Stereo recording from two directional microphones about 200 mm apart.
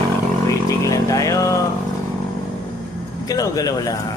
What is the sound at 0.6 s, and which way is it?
Speech, 15° left (ahead or behind).